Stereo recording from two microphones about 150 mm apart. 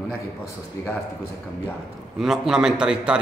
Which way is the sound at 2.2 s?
5° right (ahead or behind).